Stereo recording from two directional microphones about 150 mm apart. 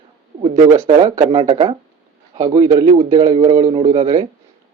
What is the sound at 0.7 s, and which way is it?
Speech, 20° right (ahead or behind).